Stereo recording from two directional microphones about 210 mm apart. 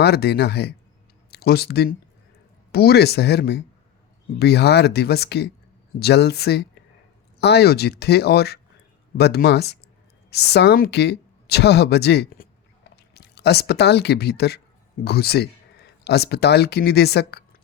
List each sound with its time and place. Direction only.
0.0 s speech: 50° left (ahead or behind)